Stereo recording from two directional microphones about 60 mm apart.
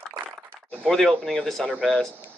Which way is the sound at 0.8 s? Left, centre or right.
Centre.